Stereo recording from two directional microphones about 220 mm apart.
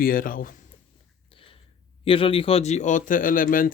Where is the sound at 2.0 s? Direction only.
25° left (ahead or behind).